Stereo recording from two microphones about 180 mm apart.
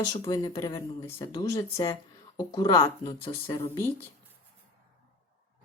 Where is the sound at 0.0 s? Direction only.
20° left (ahead or behind).